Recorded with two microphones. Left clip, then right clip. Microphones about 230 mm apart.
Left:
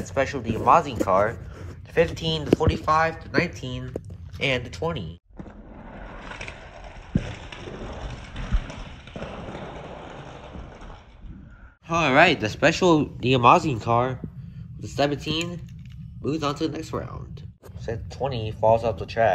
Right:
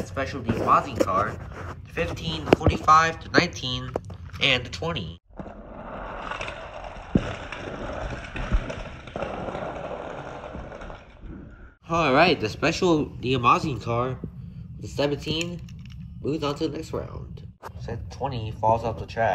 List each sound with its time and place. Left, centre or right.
0.0 s speech: centre
5.9 s scrape: centre
6.1 s skateboard: left
7.6 s a sound: left
9.7 s vehicle: left
11.9 s speech: centre
17.8 s speech: centre